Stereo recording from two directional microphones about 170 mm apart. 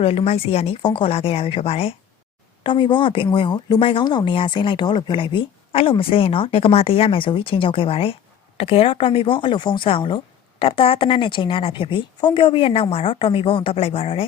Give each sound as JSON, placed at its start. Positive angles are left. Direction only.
{"t": 0.0, "sound": "speech", "side_deg": 35}